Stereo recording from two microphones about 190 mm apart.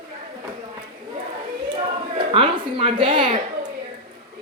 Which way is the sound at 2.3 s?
25° right (ahead or behind).